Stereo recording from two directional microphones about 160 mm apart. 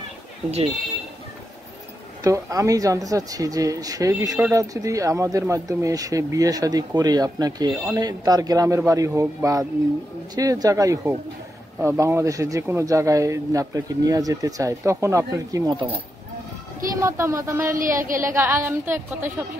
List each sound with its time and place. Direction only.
2.2 s speech: 20° right (ahead or behind)
16.9 s speech: 20° right (ahead or behind)
17.7 s a woman's voice: 55° right (ahead or behind)
18.3 s speech: 15° right (ahead or behind)